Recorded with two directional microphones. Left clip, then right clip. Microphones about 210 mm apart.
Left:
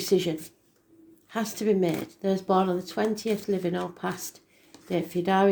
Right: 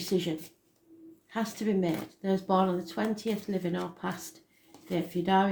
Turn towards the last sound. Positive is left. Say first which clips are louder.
# left 3 dB
turn(degrees=40)  # may be behind; listen again after turning